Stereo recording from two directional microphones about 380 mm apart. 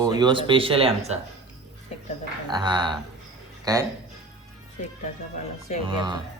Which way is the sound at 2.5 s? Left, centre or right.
Centre.